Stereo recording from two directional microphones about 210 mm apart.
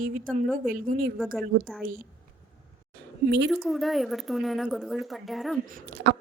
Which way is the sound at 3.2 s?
55° right (ahead or behind).